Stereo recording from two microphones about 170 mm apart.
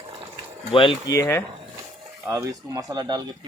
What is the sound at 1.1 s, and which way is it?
Speech, 15° left (ahead or behind).